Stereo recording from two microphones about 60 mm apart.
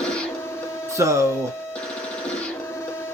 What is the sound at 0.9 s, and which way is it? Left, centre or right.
Speech, right.